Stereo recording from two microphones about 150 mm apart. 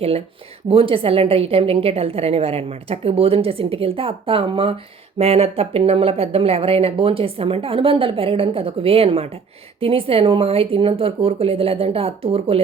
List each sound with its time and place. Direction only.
0.7 s speech: 35° right (ahead or behind)